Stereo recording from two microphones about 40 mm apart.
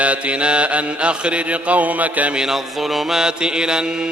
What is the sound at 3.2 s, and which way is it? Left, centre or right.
Mantra, right.